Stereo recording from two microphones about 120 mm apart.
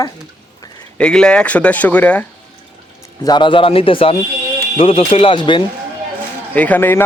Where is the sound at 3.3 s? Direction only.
40° left (ahead or behind).